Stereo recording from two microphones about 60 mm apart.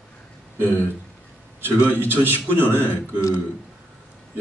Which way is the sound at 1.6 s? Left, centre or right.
Right.